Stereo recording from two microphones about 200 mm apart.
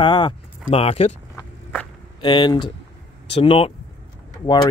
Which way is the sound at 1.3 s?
10° left (ahead or behind).